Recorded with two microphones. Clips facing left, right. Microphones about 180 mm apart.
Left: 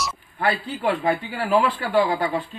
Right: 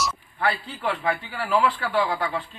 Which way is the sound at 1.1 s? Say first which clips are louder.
Left 4 dB; 20° left (ahead or behind).